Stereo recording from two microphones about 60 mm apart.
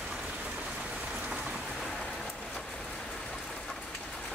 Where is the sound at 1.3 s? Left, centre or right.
Centre.